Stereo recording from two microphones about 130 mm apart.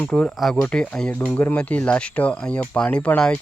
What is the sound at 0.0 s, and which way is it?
Speech, 5° left (ahead or behind).